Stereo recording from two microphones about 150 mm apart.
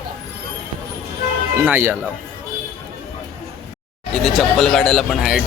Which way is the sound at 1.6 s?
10° right (ahead or behind).